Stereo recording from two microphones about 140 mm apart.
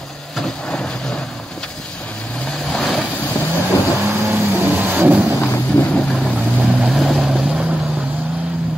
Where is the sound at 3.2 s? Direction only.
15° left (ahead or behind).